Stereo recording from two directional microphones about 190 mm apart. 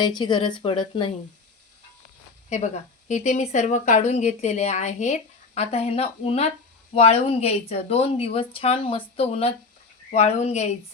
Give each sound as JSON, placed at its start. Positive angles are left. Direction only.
{"t": 0.2, "sound": "a woman's voice", "side_deg": 25}
{"t": 2.5, "sound": "speech", "side_deg": 40}